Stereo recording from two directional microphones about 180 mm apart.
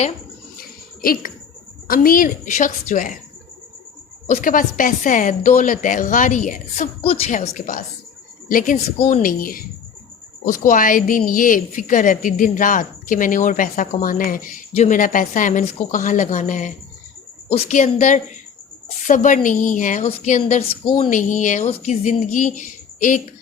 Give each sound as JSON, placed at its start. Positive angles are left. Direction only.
{"t": 1.0, "sound": "a woman's voice", "side_deg": 50}
{"t": 4.3, "sound": "a woman's voice", "side_deg": 50}